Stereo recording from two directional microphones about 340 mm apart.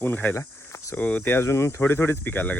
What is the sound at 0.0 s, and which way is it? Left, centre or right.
Speech, centre.